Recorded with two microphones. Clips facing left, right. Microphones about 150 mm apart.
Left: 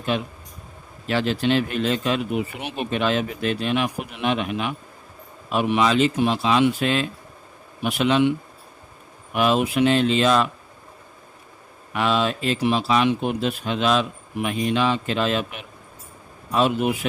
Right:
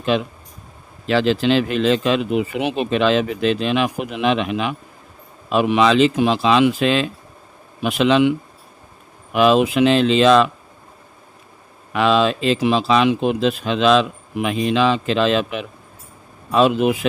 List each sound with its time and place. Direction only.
0.1 s speech: 90° right
11.9 s speech: 90° right